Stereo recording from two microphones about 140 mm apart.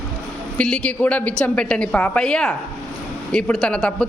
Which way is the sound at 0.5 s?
5° left (ahead or behind).